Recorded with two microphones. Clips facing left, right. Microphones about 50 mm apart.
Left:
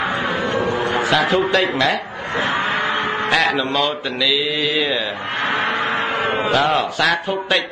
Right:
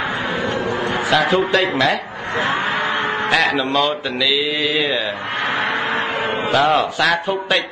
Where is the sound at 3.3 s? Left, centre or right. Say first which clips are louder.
Even; centre.